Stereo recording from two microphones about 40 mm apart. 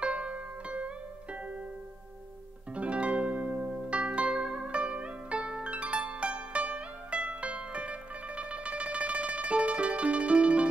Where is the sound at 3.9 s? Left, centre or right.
Right.